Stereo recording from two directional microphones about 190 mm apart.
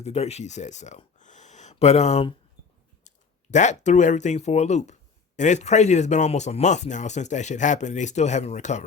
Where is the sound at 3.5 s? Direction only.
40° left (ahead or behind).